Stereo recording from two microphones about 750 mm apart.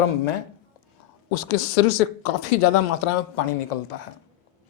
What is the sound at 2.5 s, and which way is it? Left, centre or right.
Speech, left.